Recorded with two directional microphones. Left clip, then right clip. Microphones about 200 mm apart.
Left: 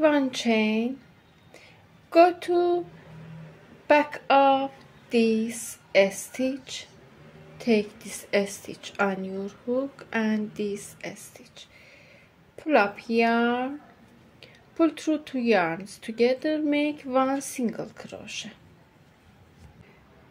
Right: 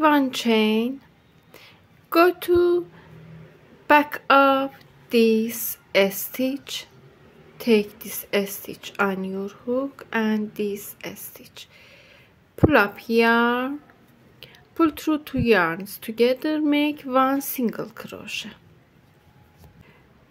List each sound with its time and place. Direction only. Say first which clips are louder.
0.0 s speech: right 3 dB; 25° right (ahead or behind)
1.5 s a sound: right 3 dB; 25° right (ahead or behind)
3.8 s speech: right 4 dB; 25° right (ahead or behind)